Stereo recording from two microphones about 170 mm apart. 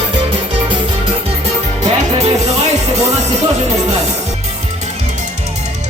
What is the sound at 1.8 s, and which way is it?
Music, 40° right (ahead or behind).